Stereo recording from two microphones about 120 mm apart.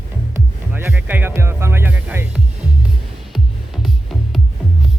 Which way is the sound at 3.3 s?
Centre (ahead or behind).